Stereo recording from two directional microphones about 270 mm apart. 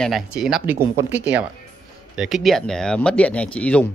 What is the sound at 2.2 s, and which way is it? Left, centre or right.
Speech, centre.